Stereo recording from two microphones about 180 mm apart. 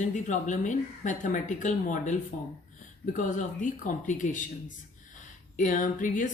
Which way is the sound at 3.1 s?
45° left (ahead or behind).